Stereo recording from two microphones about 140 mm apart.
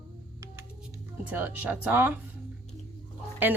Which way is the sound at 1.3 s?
15° right (ahead or behind).